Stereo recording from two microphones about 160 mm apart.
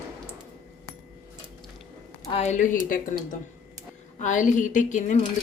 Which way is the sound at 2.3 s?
40° left (ahead or behind).